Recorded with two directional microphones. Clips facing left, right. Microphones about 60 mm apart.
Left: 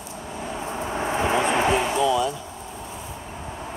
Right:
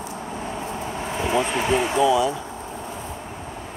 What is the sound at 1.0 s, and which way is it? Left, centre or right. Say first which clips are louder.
Vehicle: left 1 dB; left.